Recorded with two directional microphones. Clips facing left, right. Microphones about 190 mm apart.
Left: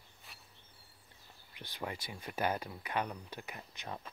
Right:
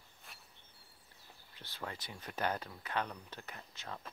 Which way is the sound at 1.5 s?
15° left (ahead or behind).